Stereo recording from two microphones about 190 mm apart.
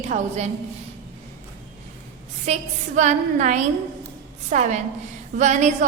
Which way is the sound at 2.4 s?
40° right (ahead or behind).